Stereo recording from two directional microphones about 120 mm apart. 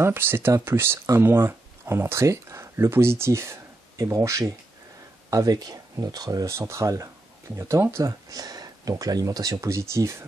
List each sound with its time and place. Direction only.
0.0 s speech: 20° right (ahead or behind)